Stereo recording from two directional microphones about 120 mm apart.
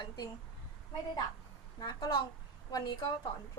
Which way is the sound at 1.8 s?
35° left (ahead or behind).